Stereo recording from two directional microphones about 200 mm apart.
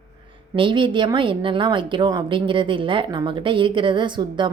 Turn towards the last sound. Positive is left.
turn(degrees=-25)  # may be behind; listen again after turning